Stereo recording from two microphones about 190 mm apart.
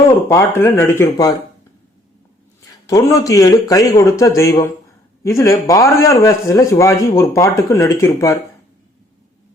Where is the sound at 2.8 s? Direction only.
20° left (ahead or behind).